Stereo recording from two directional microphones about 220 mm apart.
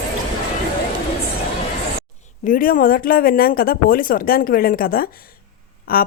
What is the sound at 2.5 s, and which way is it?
Speech, 40° left (ahead or behind).